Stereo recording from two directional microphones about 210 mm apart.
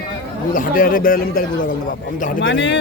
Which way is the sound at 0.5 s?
40° left (ahead or behind).